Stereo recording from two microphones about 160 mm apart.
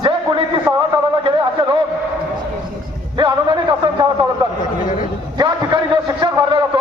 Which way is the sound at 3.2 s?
25° right (ahead or behind).